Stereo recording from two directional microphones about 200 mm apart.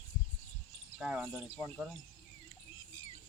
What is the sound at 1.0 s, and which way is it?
Speech, centre (ahead or behind).